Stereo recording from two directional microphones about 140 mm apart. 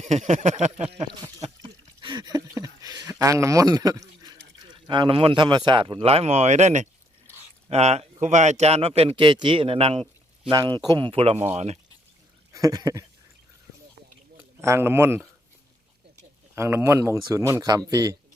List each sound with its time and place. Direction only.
0.0 s a sound: 55° right (ahead or behind)
1.6 s a sound: 30° right (ahead or behind); by 6.8 s 55° right (ahead or behind)
7.7 s a man's voice: 50° right (ahead or behind)
10.5 s a man's voice: 30° right (ahead or behind); by 11.8 s 50° right (ahead or behind)
12.5 s speech: 25° right (ahead or behind)
14.6 s speech: 20° right (ahead or behind)
16.6 s speech: 20° right (ahead or behind)